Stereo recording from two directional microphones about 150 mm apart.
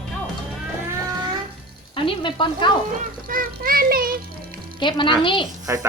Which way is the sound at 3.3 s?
70° right (ahead or behind).